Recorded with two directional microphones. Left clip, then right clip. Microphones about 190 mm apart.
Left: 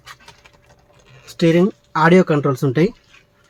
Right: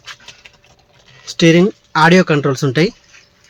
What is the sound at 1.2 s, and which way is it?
Speech, 25° right (ahead or behind).